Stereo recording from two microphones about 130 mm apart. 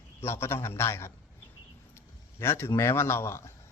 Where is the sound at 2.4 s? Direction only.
20° left (ahead or behind).